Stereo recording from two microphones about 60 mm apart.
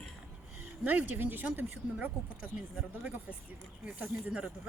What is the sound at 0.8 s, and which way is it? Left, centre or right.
Speech, right.